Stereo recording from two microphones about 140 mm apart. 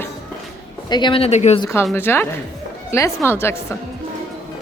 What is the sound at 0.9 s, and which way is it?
Speech, 35° left (ahead or behind).